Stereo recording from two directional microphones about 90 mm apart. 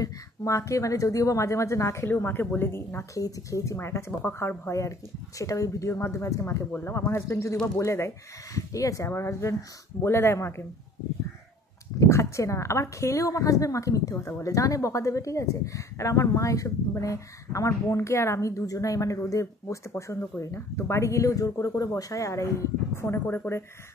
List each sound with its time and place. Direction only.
0.0 s speech: 35° left (ahead or behind)
3.2 s speech: 40° left (ahead or behind)
12.0 s speech: 30° left (ahead or behind)